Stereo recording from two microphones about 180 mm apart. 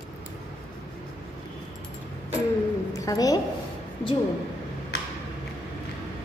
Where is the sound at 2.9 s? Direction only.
20° left (ahead or behind).